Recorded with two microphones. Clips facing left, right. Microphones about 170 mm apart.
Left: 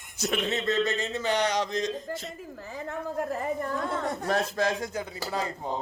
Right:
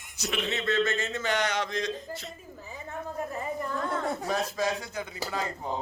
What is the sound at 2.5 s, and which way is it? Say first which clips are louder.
Speech: left 5 dB; 90° left.